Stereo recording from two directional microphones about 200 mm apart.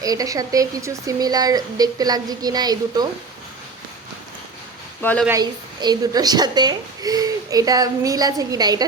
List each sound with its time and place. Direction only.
0.0 s a woman's voice: 20° right (ahead or behind)
5.2 s a woman's voice: 15° right (ahead or behind)